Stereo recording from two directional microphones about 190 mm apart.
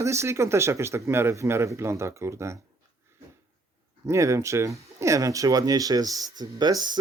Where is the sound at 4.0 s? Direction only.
15° right (ahead or behind).